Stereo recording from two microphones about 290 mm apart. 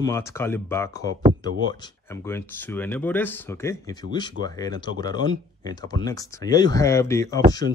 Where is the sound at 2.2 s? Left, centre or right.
Centre.